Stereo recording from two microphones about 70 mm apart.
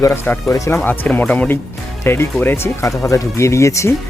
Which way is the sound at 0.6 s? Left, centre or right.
Left.